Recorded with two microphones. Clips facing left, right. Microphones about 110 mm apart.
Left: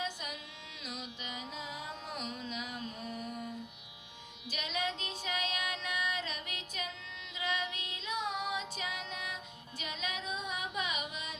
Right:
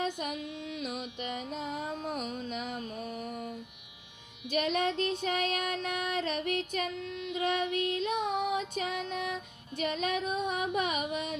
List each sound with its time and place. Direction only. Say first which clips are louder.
0.0 s music: right 7 dB; 55° right (ahead or behind)
4.4 s child singing: right 8 dB; 55° right (ahead or behind)
7.3 s music: right 7 dB; 55° right (ahead or behind)
10.8 s carnatic music: right 7 dB; 55° right (ahead or behind)